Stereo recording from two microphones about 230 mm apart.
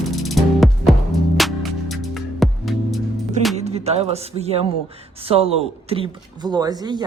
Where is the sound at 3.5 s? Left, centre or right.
Right.